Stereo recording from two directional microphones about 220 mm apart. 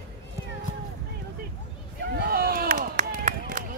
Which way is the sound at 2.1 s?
45° right (ahead or behind).